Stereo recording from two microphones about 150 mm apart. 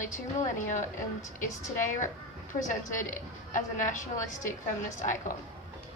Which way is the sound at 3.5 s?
55° left (ahead or behind).